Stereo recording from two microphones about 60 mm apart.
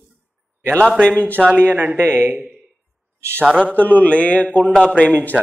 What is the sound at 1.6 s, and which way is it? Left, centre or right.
Speech, right.